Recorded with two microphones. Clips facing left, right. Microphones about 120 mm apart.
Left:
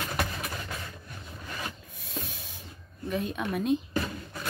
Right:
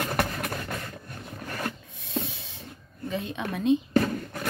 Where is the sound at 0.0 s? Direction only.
55° right (ahead or behind).